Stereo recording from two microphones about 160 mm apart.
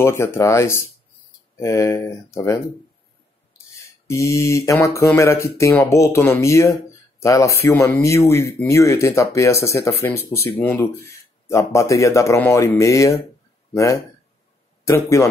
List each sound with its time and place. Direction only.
0.0 s speech: 15° left (ahead or behind)
3.7 s speech: 20° left (ahead or behind)
14.9 s speech: 20° left (ahead or behind)